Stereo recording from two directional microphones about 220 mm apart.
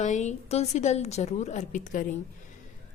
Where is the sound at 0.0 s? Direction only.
30° left (ahead or behind).